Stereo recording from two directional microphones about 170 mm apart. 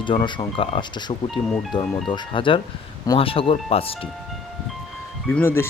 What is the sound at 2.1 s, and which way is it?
Speech, 30° left (ahead or behind).